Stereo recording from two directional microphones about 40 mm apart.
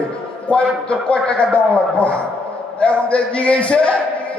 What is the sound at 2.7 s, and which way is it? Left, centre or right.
A man's voice, left.